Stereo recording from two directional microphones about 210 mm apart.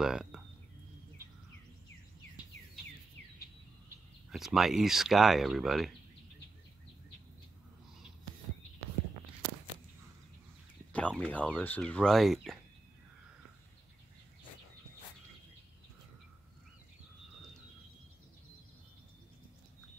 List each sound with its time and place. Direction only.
0.0 s speech: 5° right (ahead or behind)
4.3 s speech: centre (ahead or behind)
10.9 s speech: 5° left (ahead or behind)